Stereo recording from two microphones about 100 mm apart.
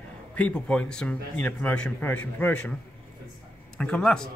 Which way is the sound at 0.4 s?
10° left (ahead or behind).